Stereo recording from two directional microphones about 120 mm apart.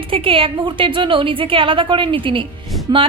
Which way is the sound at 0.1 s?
50° right (ahead or behind).